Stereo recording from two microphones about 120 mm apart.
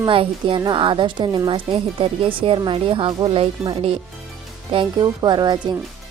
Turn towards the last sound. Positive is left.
turn(degrees=-40)  # may be behind; listen again after turning